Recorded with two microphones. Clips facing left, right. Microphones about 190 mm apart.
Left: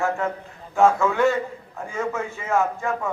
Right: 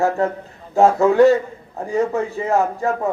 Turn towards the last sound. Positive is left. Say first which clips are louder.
# right 5 dB
turn(degrees=-40)  # may be behind; listen again after turning